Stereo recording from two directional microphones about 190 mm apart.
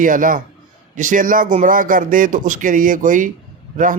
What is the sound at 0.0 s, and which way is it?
Speech, 45° right (ahead or behind).